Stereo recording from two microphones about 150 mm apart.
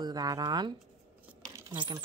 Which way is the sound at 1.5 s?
30° right (ahead or behind).